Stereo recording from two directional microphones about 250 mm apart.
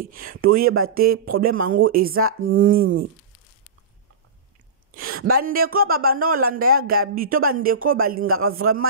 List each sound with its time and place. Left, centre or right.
0.0 s speech: right
0.7 s speech: right
0.9 s speech: right
2.2 s speech: right
2.6 s speech: right
5.4 s speech: right
6.8 s speech: right
7.2 s speech: right